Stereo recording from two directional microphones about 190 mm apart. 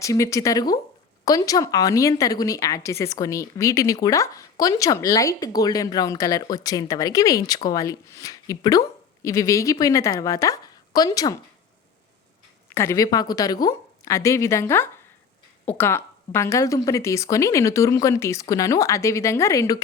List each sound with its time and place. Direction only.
0.0 s a woman's voice: 15° left (ahead or behind)
12.7 s a woman's voice: 15° left (ahead or behind)